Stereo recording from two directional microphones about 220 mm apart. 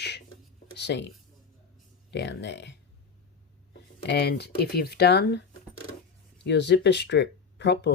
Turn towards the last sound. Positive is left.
turn(degrees=50)  # may be behind; listen again after turning